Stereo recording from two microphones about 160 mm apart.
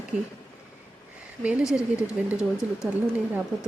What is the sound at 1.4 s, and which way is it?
Speech, 5° right (ahead or behind).